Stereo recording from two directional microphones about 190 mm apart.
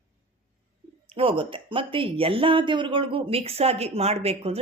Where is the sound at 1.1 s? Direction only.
30° right (ahead or behind).